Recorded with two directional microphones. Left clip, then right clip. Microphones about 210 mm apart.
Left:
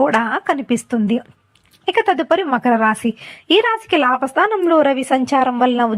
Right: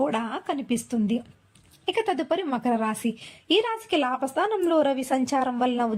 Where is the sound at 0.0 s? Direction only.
15° left (ahead or behind).